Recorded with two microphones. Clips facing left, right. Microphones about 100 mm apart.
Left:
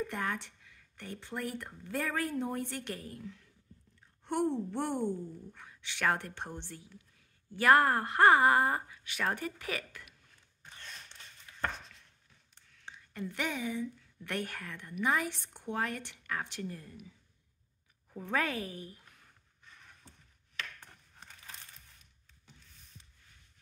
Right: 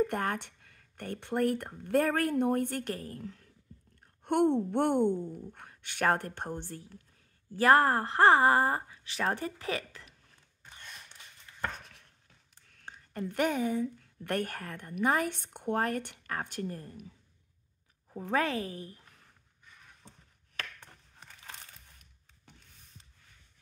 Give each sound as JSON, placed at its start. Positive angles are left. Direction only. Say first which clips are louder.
{"t": 0.0, "sound": "a woman's voice", "louder": "right 5 dB", "side_deg": -50}
{"t": 4.2, "sound": "a woman's voice", "louder": "right 6 dB", "side_deg": -60}
{"t": 5.5, "sound": "a woman's voice", "louder": "even", "side_deg": -50}
{"t": 7.5, "sound": "speech", "louder": "right 2 dB", "side_deg": -35}
{"t": 10.7, "sound": "a sound", "louder": "even", "side_deg": -10}
{"t": 12.8, "sound": "a woman's voice", "louder": "right 3 dB", "side_deg": -45}
{"t": 18.2, "sound": "speech", "louder": "right 3 dB", "side_deg": -30}